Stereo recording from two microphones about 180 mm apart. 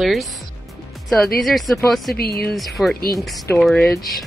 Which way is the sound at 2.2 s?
60° left (ahead or behind).